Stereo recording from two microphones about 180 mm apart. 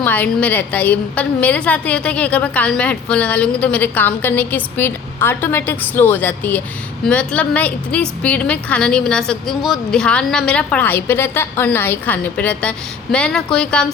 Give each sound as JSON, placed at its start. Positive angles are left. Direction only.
{"t": 0.0, "sound": "a woman's voice", "side_deg": 10}